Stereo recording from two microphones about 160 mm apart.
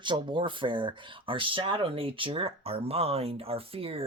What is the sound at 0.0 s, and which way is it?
Speech, 30° right (ahead or behind).